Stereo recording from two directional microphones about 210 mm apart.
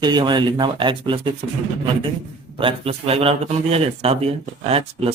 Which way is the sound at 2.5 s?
25° right (ahead or behind).